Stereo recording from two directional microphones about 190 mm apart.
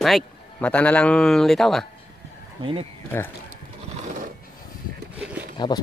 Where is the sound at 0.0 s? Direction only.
5° left (ahead or behind).